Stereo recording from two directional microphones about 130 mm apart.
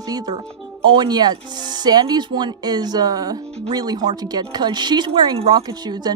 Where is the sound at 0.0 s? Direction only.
30° right (ahead or behind).